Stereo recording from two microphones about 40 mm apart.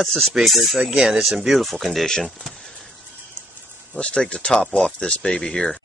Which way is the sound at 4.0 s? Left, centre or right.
Left.